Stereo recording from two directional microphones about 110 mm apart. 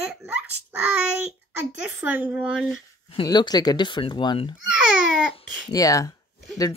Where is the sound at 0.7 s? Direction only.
15° right (ahead or behind).